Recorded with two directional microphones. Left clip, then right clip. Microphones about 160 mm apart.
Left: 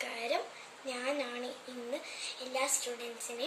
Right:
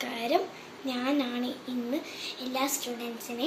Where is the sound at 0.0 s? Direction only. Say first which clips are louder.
Right 5 dB; 20° left (ahead or behind).